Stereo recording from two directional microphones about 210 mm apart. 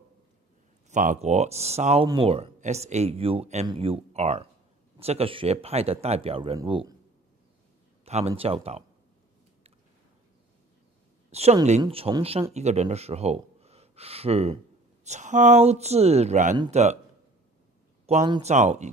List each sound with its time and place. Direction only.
0.8 s speech: 35° right (ahead or behind)
8.0 s speech: 30° right (ahead or behind)
11.3 s speech: 30° right (ahead or behind)
18.1 s speech: 30° right (ahead or behind)